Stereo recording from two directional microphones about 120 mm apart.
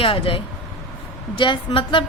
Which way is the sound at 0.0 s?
50° left (ahead or behind).